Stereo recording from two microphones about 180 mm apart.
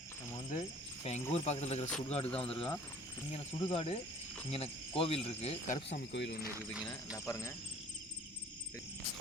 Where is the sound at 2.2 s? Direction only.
5° left (ahead or behind).